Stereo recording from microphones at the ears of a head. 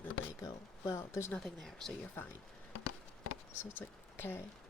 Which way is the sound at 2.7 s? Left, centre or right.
Left.